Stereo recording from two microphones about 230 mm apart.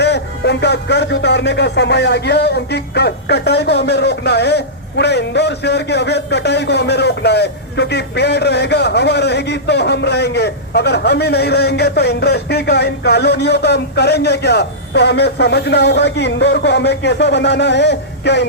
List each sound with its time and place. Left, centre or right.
0.0 s speech: left